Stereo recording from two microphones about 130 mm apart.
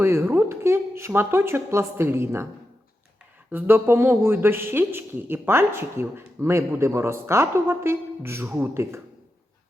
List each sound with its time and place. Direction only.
0.0 s speech: 20° right (ahead or behind)
3.5 s speech: 15° right (ahead or behind)